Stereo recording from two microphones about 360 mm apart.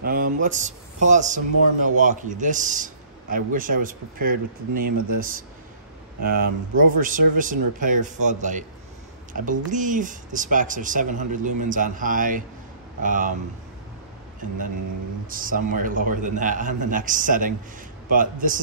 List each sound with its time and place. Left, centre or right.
0.0 s a man's voice: right
15.2 s a man's voice: right